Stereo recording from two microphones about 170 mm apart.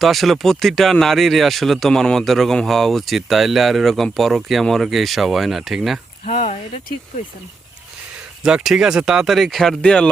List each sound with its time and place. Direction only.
0.0 s speech: centre (ahead or behind)
6.2 s speech: 45° left (ahead or behind)
8.4 s speech: 5° right (ahead or behind)